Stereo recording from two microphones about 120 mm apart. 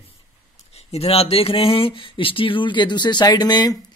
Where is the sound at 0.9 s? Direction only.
55° left (ahead or behind).